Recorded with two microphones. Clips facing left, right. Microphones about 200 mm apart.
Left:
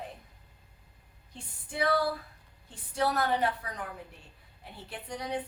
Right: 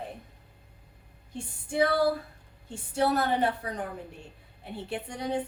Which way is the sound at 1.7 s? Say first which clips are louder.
Right 4 dB; 25° right (ahead or behind).